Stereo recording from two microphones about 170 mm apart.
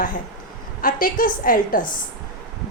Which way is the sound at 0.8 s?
55° left (ahead or behind).